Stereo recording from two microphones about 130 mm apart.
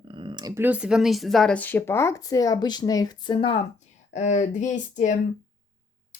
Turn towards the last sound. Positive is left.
turn(degrees=70)  # may be behind; listen again after turning